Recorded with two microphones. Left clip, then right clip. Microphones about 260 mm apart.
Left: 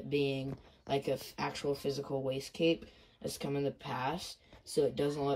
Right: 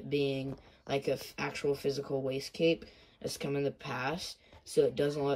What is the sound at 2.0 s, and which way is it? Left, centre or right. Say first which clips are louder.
Speech: right 2 dB; centre.